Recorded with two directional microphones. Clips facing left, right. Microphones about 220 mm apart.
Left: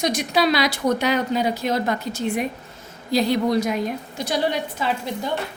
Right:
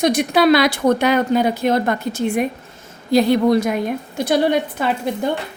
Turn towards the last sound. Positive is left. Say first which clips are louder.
# right 5 dB
turn(degrees=-55)  # may be behind; listen again after turning